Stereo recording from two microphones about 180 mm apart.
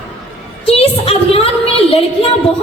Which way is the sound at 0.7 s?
35° left (ahead or behind).